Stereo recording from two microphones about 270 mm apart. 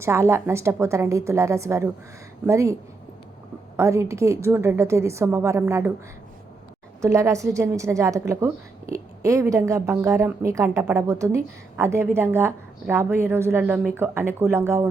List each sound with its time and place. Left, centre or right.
0.0 s speech: centre
3.8 s speech: centre
7.0 s speech: centre